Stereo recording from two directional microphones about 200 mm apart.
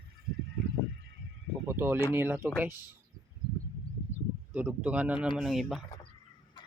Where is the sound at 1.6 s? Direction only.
10° right (ahead or behind).